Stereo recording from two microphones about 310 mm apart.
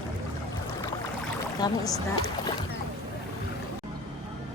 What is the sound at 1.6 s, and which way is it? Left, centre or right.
Speech, centre.